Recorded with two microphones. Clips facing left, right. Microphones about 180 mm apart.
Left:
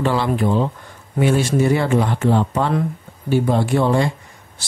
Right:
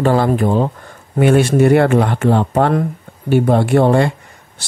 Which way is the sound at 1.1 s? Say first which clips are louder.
Right 5 dB; 60° right (ahead or behind).